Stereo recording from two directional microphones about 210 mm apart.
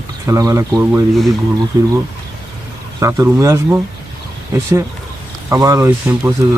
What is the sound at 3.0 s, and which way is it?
Speech, 15° right (ahead or behind).